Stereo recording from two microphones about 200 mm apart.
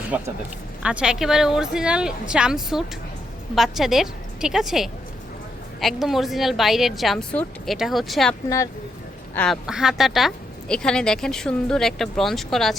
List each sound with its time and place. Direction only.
0.8 s a woman's voice: 5° right (ahead or behind)
8.4 s speech: 15° left (ahead or behind)
9.3 s a woman's voice: 5° left (ahead or behind)